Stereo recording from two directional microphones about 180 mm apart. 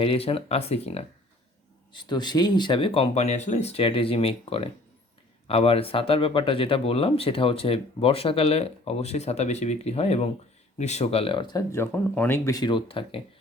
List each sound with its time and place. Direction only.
0.0 s speech: 30° left (ahead or behind)
1.9 s speech: 25° left (ahead or behind)
12.5 s speech: 25° left (ahead or behind)